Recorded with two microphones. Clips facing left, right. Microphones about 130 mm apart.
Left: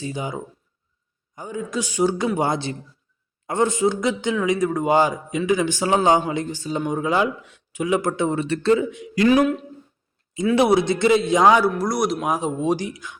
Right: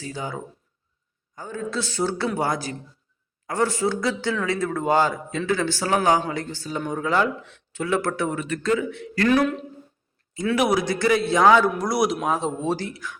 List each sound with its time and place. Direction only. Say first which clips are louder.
0.0 s a man's voice: left 3 dB; 15° left (ahead or behind)
8.9 s a man's voice: left 3 dB; 15° left (ahead or behind)
10.5 s a man's voice: left 4 dB; 25° left (ahead or behind)
11.8 s speech: even; centre (ahead or behind)
12.3 s a man's voice: left 2 dB; 10° left (ahead or behind)